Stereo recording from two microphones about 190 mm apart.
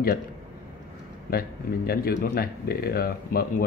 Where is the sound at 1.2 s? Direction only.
55° left (ahead or behind).